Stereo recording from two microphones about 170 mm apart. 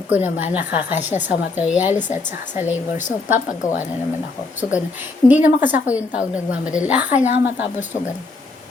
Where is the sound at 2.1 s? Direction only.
45° left (ahead or behind).